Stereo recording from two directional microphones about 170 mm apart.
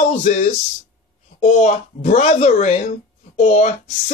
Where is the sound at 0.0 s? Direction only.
45° left (ahead or behind).